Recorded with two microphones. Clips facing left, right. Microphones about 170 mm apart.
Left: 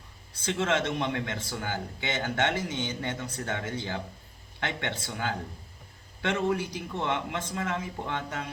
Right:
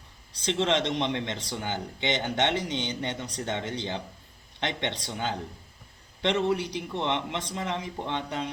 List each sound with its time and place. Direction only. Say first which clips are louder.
0.3 s a man's voice: right 2 dB; 15° right (ahead or behind)